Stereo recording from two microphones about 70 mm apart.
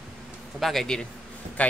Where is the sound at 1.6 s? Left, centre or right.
Left.